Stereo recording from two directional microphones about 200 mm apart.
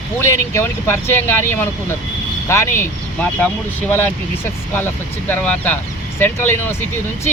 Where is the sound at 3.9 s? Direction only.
10° left (ahead or behind).